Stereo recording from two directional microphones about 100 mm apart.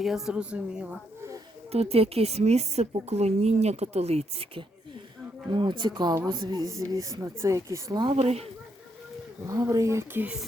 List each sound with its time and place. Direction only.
0.0 s a woman's voice: 5° right (ahead or behind)
1.7 s a woman's voice: 90° right
5.5 s speech: 50° right (ahead or behind); by 7.9 s 30° right (ahead or behind)
8.1 s speech: 85° right
9.5 s speech: 35° right (ahead or behind)